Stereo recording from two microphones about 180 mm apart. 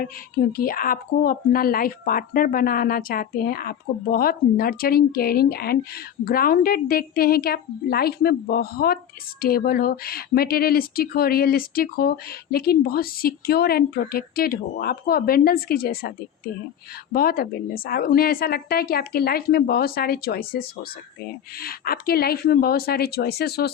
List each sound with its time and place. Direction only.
0.5 s speech: 50° left (ahead or behind)